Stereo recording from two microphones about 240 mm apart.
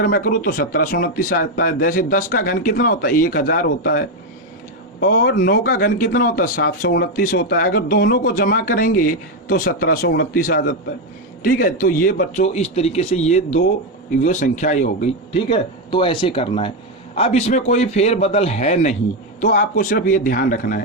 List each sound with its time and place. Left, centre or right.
0.0 s a man's voice: left